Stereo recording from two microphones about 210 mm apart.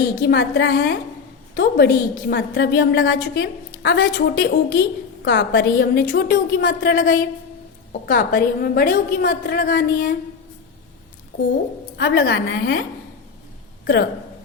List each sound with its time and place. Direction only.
0.2 s a woman's voice: 45° left (ahead or behind)
11.9 s a woman's voice: 50° left (ahead or behind)
13.8 s speech: 55° left (ahead or behind)